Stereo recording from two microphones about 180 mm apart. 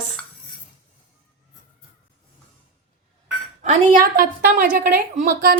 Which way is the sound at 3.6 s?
45° right (ahead or behind).